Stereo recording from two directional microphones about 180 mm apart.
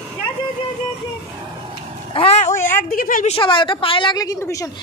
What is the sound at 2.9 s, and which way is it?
Speech, 50° left (ahead or behind).